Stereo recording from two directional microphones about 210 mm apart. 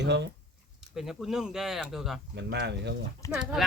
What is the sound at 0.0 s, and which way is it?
Speech, 55° right (ahead or behind).